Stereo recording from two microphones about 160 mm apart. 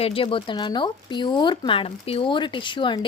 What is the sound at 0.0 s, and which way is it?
A woman's voice, 35° left (ahead or behind).